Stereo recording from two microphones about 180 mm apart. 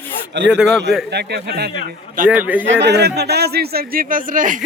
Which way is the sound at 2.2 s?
10° right (ahead or behind).